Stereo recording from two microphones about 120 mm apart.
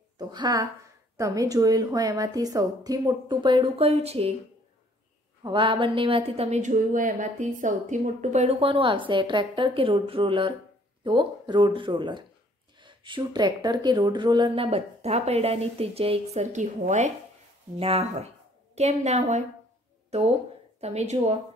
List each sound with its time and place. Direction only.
0.2 s a woman's voice: 35° right (ahead or behind)
3.7 s a woman's voice: 60° right (ahead or behind)
5.4 s a woman's voice: 45° right (ahead or behind); by 8.5 s 75° right (ahead or behind)
8.5 s speech: 45° right (ahead or behind)
14.6 s a woman's voice: 60° right (ahead or behind); by 17.1 s 85° right
17.7 s a woman's voice: 55° right (ahead or behind)
18.8 s a woman's voice: 65° right (ahead or behind)